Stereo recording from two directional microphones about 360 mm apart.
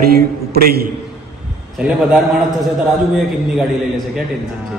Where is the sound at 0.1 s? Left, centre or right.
Right.